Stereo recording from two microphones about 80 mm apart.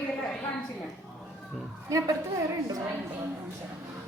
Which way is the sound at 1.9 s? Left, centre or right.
Right.